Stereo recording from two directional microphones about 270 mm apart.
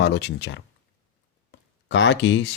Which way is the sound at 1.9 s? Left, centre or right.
Left.